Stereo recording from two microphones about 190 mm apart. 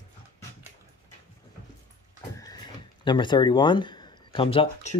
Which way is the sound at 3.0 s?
25° left (ahead or behind).